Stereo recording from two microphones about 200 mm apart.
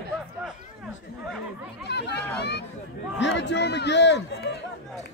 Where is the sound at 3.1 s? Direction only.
60° left (ahead or behind).